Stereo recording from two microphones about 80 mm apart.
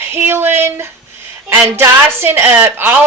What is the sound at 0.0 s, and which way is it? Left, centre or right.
A woman's voice, right.